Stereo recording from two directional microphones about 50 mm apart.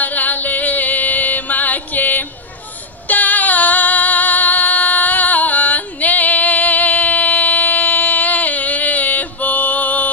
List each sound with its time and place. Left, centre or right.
0.0 s music: left
3.1 s female singing: left